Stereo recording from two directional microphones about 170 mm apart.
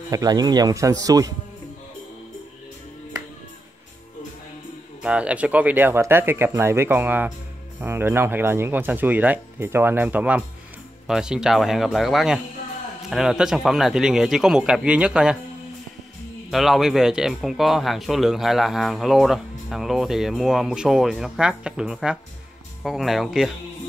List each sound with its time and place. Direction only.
0.1 s speech: 20° right (ahead or behind)
5.0 s speech: 5° right (ahead or behind)
16.4 s speech: centre (ahead or behind)